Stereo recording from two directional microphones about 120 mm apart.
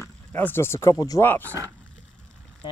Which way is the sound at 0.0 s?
15° left (ahead or behind).